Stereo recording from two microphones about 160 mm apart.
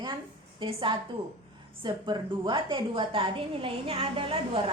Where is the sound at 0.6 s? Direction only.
30° right (ahead or behind).